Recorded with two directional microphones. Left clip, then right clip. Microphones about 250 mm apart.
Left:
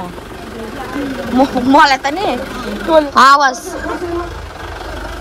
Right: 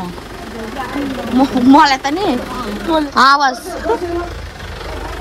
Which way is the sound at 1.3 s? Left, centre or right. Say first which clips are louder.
Even; centre.